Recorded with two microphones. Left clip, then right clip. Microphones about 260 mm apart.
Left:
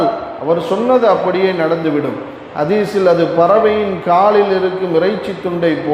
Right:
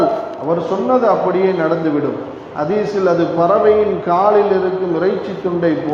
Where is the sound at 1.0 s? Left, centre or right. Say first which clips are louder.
Left 1 dB; left.